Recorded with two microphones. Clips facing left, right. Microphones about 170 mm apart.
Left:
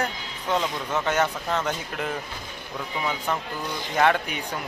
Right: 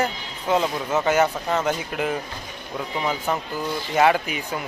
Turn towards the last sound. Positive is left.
turn(degrees=-5)  # may be behind; listen again after turning